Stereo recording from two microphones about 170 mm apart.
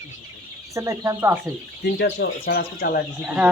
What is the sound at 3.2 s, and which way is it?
Speech, 5° right (ahead or behind).